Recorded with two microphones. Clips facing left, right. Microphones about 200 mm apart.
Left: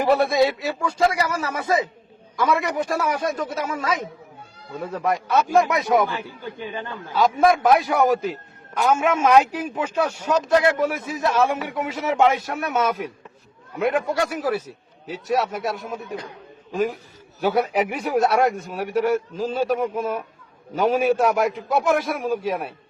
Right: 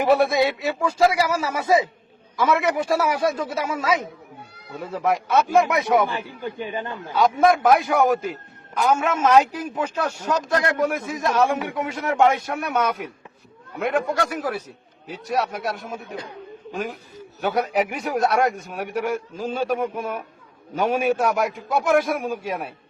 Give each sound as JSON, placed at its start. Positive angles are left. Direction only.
{"t": 0.1, "sound": "a man's voice", "side_deg": 0}
{"t": 6.2, "sound": "a man's voice", "side_deg": -15}
{"t": 7.2, "sound": "a man's voice", "side_deg": 0}